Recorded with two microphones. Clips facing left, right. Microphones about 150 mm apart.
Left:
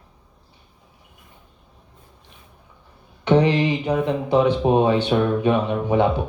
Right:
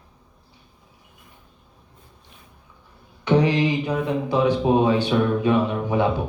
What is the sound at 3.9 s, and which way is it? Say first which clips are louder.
Mantra: left 3 dB; 20° left (ahead or behind).